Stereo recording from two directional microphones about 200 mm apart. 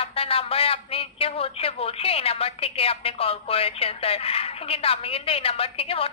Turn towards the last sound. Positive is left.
turn(degrees=30)  # may be behind; listen again after turning